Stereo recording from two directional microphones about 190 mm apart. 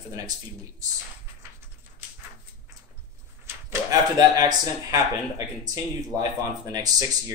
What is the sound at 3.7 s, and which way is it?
Speech, 20° right (ahead or behind).